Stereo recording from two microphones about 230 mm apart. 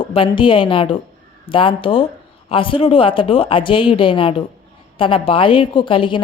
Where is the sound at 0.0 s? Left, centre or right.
Left.